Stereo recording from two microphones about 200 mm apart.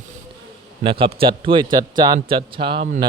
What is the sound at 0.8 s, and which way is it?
Speech, 25° right (ahead or behind).